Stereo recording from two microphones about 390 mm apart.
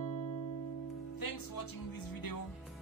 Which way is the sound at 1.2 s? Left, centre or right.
Left.